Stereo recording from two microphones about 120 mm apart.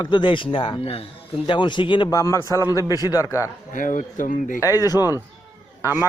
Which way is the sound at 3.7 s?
90° left.